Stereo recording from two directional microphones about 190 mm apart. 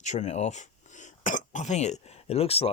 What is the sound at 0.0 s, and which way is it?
Speech, 40° left (ahead or behind).